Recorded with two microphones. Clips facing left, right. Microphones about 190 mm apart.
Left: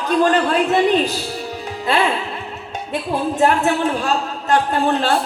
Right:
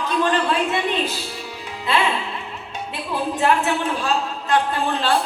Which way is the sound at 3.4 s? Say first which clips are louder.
Left 4 dB; 45° left (ahead or behind).